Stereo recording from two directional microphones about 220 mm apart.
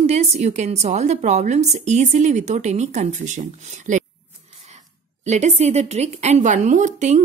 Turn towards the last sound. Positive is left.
turn(degrees=-35)  # may be behind; listen again after turning